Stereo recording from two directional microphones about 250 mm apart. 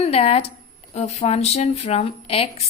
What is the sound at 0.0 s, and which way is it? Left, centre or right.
A woman's voice, left.